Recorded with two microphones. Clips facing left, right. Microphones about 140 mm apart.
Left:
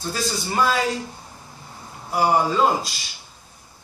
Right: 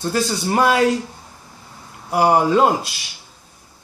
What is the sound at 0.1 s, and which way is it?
Speech, 60° right (ahead or behind).